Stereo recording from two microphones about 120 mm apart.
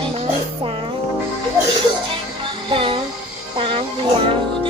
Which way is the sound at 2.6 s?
45° right (ahead or behind).